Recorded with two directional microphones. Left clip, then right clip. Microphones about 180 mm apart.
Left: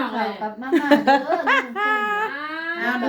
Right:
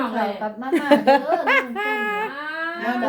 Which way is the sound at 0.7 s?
5° right (ahead or behind).